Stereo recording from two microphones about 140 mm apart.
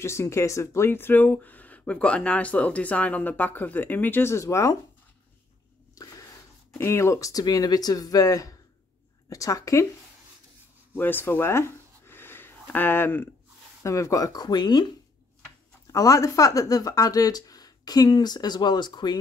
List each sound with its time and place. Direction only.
0.0 s speech: 20° left (ahead or behind)
6.8 s speech: 20° left (ahead or behind)
11.0 s a sound: 15° left (ahead or behind)
13.8 s speech: 20° left (ahead or behind)
15.9 s speech: 25° left (ahead or behind)